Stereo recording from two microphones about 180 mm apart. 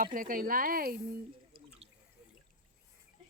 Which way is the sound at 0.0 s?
50° right (ahead or behind).